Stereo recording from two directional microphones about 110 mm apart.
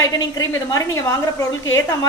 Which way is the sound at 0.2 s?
30° left (ahead or behind).